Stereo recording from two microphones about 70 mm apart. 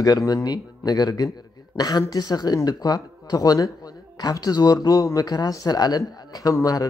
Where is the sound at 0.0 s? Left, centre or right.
Left.